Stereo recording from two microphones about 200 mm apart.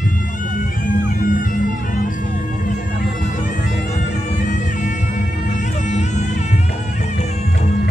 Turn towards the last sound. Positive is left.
turn(degrees=35)  # may be behind; listen again after turning